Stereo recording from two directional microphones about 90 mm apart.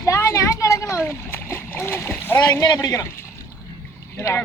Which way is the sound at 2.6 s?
50° left (ahead or behind).